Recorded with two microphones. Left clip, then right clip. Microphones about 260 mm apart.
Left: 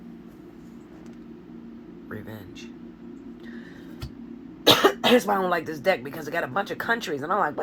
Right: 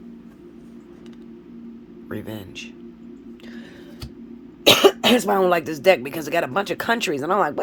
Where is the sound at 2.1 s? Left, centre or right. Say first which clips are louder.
Right 7 dB; right.